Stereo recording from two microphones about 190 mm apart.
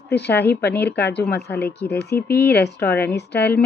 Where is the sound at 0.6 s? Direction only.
10° left (ahead or behind).